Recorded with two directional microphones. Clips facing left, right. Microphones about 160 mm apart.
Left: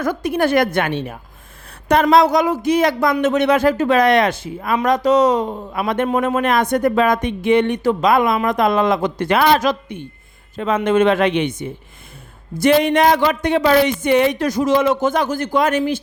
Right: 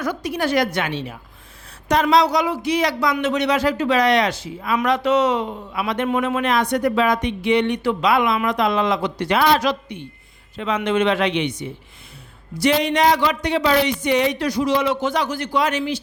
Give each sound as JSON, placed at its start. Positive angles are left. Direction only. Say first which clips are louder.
{"t": 0.0, "sound": "speech", "louder": "left 5 dB", "side_deg": 50}
{"t": 4.8, "sound": "speech", "louder": "left 4 dB", "side_deg": 40}